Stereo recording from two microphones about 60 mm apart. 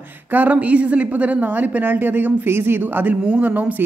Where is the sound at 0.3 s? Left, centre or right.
Right.